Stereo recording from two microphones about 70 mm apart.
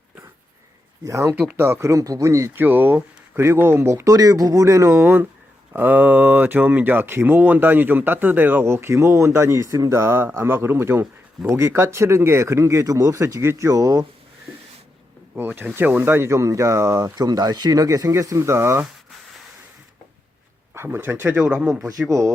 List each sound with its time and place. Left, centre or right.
1.0 s speech: right
1.5 s speech: right
2.5 s speech: right
4.0 s speech: right
15.4 s speech: right
18.1 s speech: right
20.7 s speech: right
22.1 s speech: right